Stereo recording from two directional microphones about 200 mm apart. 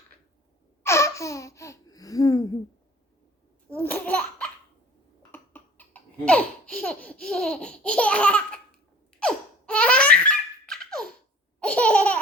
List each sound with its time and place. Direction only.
0.8 s laughter: 15° left (ahead or behind)
3.7 s speech: 10° left (ahead or behind)
5.3 s laughter: 10° left (ahead or behind)